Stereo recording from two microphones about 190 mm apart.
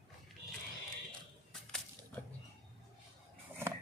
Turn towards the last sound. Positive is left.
turn(degrees=-10)  # may be behind; listen again after turning